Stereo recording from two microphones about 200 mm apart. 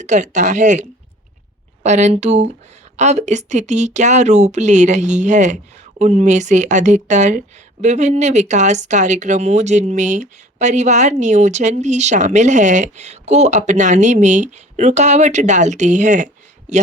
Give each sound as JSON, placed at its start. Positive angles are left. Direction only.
{"t": 0.0, "sound": "speech", "side_deg": -35}